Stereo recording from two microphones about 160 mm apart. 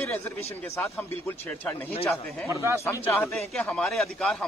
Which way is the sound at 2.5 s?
15° right (ahead or behind).